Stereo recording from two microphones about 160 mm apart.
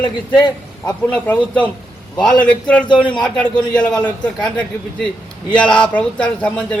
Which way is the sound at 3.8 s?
25° left (ahead or behind).